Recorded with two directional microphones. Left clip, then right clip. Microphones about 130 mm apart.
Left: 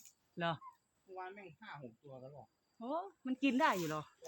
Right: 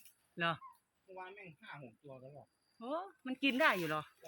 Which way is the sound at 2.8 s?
45° left (ahead or behind).